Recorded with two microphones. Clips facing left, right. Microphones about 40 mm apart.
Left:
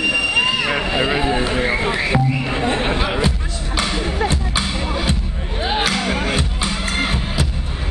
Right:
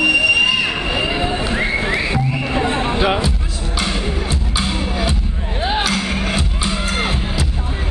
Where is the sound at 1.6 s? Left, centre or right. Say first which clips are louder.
Even; centre.